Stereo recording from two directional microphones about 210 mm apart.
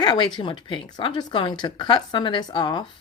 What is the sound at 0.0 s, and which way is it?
Speech, 20° left (ahead or behind).